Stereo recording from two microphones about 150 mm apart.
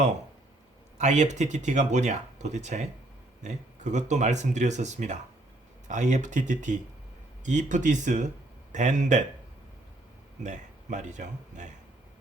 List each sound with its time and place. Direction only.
0.9 s speech: 50° right (ahead or behind)
10.4 s speech: 55° right (ahead or behind)